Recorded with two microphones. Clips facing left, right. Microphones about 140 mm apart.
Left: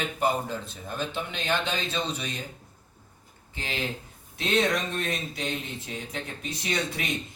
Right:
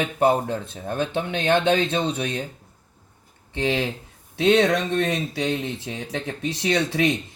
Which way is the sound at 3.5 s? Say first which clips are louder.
Right 9 dB; 75° right (ahead or behind).